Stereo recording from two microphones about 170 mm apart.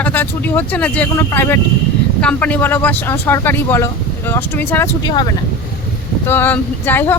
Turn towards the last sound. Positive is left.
turn(degrees=10)  # may be behind; listen again after turning